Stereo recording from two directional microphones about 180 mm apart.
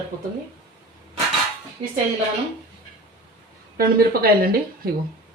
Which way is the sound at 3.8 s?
55° right (ahead or behind).